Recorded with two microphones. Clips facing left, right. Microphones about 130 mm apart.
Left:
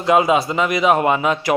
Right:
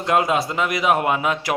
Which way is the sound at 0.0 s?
Centre (ahead or behind).